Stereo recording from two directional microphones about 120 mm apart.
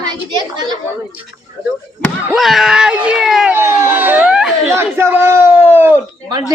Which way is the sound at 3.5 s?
20° right (ahead or behind).